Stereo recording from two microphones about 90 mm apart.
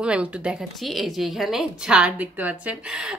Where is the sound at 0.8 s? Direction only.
Centre (ahead or behind).